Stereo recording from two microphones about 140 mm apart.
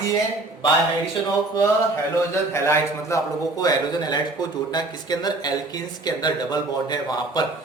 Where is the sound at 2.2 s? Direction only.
20° left (ahead or behind).